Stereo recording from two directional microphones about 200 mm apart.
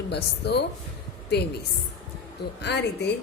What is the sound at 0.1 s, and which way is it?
Speech, 55° left (ahead or behind).